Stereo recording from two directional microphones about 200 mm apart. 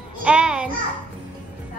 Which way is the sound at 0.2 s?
5° right (ahead or behind).